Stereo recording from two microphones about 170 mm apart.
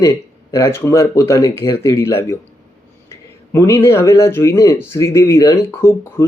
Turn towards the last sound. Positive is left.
turn(degrees=15)  # may be behind; listen again after turning